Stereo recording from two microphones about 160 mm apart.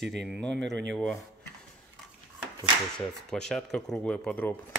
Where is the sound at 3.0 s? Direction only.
5° left (ahead or behind).